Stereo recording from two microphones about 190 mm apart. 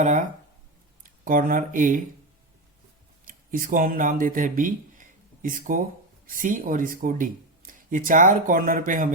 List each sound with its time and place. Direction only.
0.0 s a sound: 40° right (ahead or behind)
1.0 s speech: 45° right (ahead or behind)
3.2 s speech: 45° right (ahead or behind)